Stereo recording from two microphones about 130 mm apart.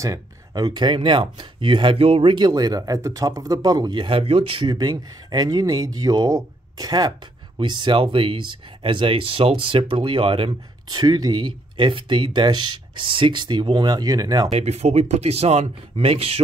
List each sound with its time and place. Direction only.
0.0 s a man's voice: 25° right (ahead or behind); by 2.3 s 45° right (ahead or behind)
2.3 s a man's voice: 30° right (ahead or behind)
14.5 s speech: 55° right (ahead or behind)